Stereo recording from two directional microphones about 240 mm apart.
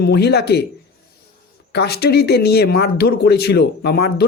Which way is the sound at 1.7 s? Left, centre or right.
Left.